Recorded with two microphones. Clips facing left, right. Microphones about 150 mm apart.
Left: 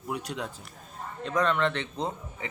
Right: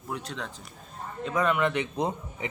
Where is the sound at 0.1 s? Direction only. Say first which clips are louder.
Left 2 dB; 10° left (ahead or behind).